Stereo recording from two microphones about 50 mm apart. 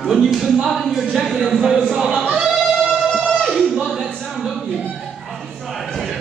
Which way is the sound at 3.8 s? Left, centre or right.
Centre.